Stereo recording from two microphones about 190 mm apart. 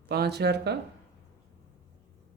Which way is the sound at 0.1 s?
60° right (ahead or behind).